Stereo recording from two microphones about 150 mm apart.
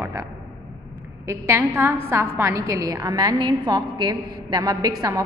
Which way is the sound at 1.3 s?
15° right (ahead or behind).